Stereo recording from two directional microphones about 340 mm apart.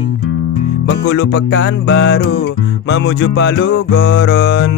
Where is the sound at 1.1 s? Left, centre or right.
Left.